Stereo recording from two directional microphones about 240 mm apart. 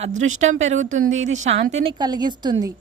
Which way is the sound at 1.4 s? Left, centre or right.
Right.